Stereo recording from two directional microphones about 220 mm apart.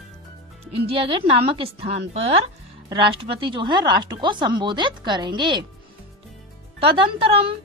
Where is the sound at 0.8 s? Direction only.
25° right (ahead or behind).